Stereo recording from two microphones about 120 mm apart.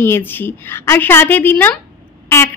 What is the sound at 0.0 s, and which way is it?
A woman's voice, 20° left (ahead or behind).